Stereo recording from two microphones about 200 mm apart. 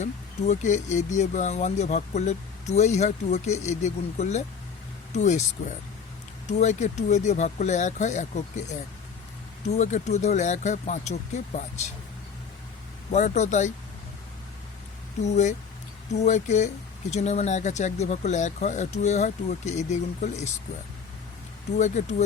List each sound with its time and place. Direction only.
0.0 s speech: 35° left (ahead or behind)
13.1 s speech: 35° left (ahead or behind)
15.2 s speech: 35° left (ahead or behind)
21.8 s speech: 35° left (ahead or behind)